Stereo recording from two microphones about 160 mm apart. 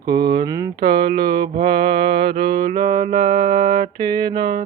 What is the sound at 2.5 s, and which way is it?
Music, 55° right (ahead or behind).